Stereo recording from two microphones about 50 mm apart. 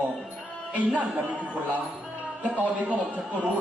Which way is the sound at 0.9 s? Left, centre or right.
Right.